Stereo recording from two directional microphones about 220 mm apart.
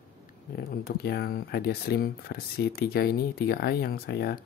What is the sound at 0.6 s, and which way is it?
Speech, 45° left (ahead or behind).